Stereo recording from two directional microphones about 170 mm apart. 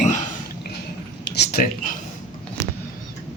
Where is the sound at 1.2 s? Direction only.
75° left (ahead or behind).